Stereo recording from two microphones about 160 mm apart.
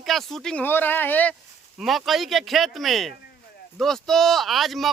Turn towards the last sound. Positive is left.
turn(degrees=0)  # may be behind; listen again after turning